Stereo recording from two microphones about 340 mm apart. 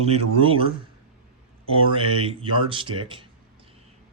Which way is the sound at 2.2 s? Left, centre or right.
Centre.